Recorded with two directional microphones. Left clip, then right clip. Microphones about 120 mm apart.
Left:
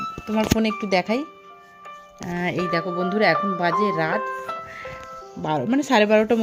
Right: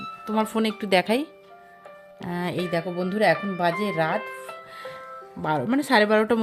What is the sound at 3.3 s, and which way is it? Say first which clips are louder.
Speech: left 8 dB; 50° left (ahead or behind).